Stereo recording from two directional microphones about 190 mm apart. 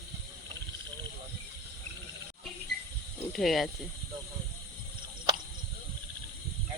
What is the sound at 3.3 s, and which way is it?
Speech, centre (ahead or behind).